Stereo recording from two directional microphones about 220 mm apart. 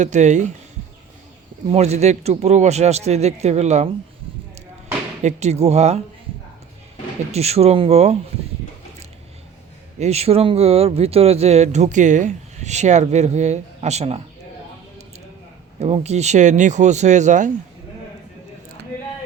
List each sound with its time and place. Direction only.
0.0 s speech: 35° right (ahead or behind)
1.6 s speech: 30° right (ahead or behind)
5.2 s speech: 30° right (ahead or behind)
7.3 s speech: 30° right (ahead or behind)
10.0 s speech: 30° right (ahead or behind)
15.8 s speech: 30° right (ahead or behind)